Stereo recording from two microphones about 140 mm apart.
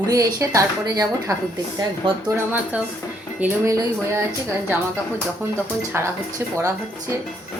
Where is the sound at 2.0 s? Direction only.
40° right (ahead or behind).